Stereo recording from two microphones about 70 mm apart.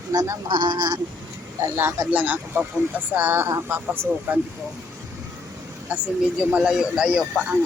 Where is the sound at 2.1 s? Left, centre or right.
Right.